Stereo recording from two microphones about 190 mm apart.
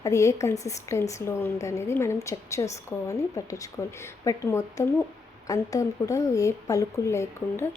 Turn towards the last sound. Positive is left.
turn(degrees=15)  # may be behind; listen again after turning